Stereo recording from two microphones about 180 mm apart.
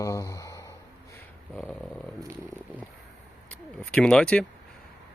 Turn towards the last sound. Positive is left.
turn(degrees=5)  # may be behind; listen again after turning